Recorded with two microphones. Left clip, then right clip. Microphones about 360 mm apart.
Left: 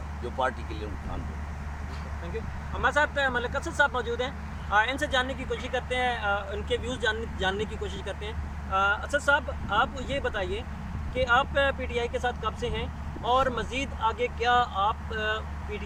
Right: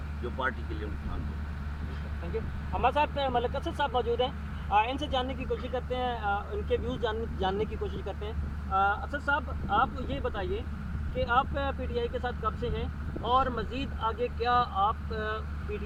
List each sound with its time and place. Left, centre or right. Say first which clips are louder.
2.9 s speech: left 3 dB; right